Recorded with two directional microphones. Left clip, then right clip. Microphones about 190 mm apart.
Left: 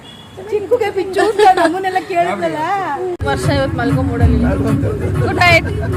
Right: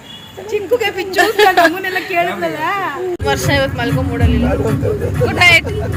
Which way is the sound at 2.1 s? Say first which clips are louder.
Left 1 dB; 65° left (ahead or behind).